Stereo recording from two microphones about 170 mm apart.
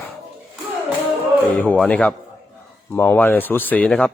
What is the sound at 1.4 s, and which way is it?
Speech, 10° left (ahead or behind).